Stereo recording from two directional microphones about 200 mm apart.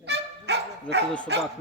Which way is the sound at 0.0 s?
60° right (ahead or behind).